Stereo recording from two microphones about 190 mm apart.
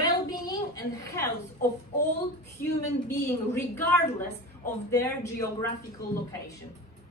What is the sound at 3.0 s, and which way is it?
A woman's voice, 15° left (ahead or behind).